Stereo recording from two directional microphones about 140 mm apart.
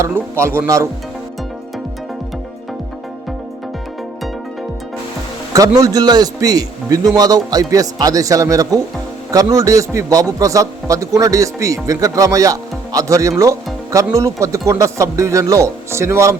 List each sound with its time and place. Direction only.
0.0 s a man's voice: 20° right (ahead or behind)
5.5 s a man's voice: 25° right (ahead or behind)